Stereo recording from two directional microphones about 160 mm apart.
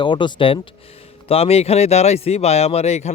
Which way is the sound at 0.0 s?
30° left (ahead or behind).